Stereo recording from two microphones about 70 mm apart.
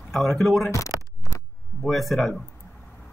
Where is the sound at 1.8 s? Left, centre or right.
Centre.